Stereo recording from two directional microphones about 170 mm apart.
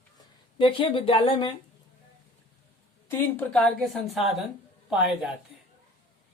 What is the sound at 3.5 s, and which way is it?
A woman's voice, 5° left (ahead or behind).